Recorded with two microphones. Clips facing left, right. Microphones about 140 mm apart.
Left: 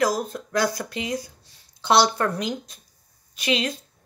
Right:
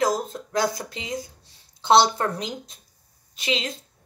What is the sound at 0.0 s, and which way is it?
A woman's voice, 25° right (ahead or behind).